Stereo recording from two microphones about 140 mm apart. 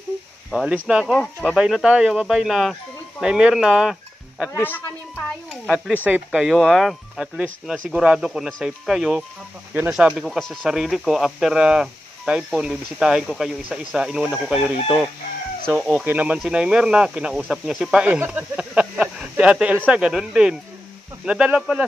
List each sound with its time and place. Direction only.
0.5 s speech: centre (ahead or behind)
1.1 s speech: 5° left (ahead or behind)
4.5 s speech: 15° left (ahead or behind)
5.5 s a sound: 5° right (ahead or behind)
6.0 s speech: 10° right (ahead or behind)